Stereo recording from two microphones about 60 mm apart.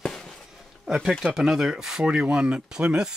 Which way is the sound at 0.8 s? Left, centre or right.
Centre.